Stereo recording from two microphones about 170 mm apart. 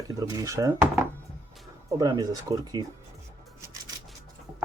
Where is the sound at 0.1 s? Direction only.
20° right (ahead or behind).